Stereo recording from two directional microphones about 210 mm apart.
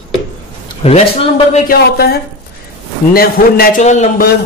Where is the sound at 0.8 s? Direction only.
30° left (ahead or behind).